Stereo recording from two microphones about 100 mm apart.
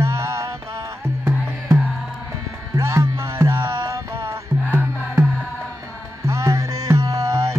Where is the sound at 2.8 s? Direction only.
30° right (ahead or behind).